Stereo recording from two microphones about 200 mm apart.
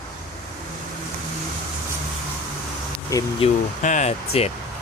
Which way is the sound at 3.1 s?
15° left (ahead or behind).